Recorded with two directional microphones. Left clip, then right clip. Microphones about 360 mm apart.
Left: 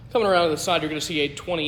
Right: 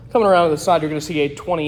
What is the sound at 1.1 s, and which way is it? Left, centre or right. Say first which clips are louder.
Speech: right 6 dB; right.